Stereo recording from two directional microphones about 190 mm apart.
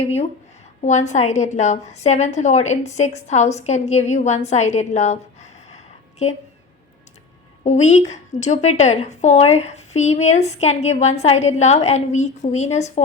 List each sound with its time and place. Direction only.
0.0 s a woman's voice: 30° left (ahead or behind)
7.6 s a woman's voice: 40° left (ahead or behind)